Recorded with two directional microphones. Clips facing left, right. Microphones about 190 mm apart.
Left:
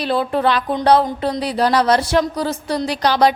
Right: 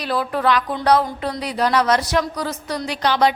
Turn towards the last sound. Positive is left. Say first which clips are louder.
# left 3 dB
turn(degrees=35)  # may be behind; listen again after turning